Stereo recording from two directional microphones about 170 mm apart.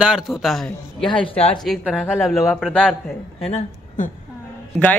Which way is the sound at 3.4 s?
40° left (ahead or behind).